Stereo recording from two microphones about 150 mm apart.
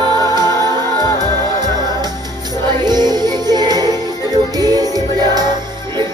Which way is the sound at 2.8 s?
25° right (ahead or behind).